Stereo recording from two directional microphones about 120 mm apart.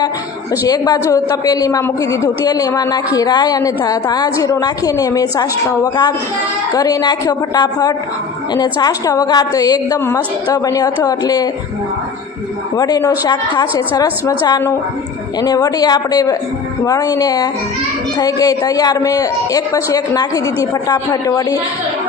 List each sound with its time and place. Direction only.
0.7 s a woman's voice: 30° left (ahead or behind)
12.7 s a woman's voice: 30° left (ahead or behind)